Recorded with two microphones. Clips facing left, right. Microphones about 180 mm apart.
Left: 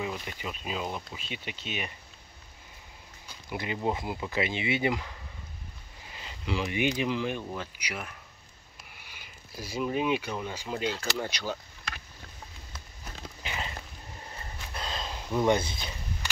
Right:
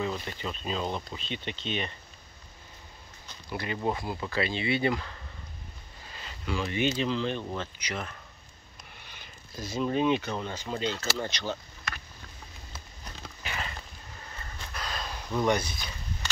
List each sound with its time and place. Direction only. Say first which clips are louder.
0.0 s speech: right 2 dB; 10° left (ahead or behind)
3.3 s speech: even; 15° left (ahead or behind)
13.4 s a sound: even; 20° left (ahead or behind)